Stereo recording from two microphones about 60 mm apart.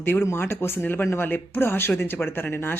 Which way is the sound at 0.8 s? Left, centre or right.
Left.